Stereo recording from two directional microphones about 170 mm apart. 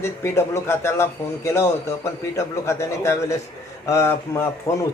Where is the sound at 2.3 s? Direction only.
15° left (ahead or behind).